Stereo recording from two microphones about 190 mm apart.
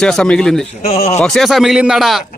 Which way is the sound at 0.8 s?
35° left (ahead or behind).